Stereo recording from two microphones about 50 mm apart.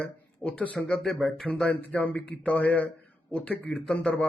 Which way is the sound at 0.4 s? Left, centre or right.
Left.